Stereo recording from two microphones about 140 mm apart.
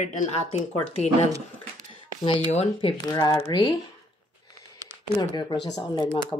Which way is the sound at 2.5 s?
50° left (ahead or behind).